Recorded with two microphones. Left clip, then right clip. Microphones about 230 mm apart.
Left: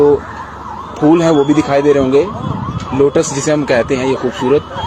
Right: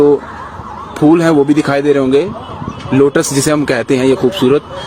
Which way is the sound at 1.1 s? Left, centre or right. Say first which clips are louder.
Even; right.